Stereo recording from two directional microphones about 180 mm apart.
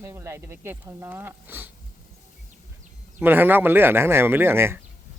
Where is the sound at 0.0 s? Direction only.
15° right (ahead or behind).